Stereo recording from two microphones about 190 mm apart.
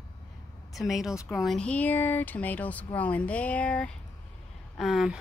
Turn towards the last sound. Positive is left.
turn(degrees=0)  # may be behind; listen again after turning